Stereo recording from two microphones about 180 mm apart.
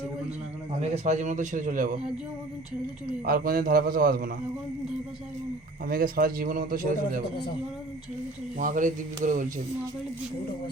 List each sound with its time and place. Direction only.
0.8 s a man's voice: 40° right (ahead or behind)
3.2 s a man's voice: 55° right (ahead or behind)
5.9 s a man's voice: 55° right (ahead or behind)
8.5 s a man's voice: 45° right (ahead or behind)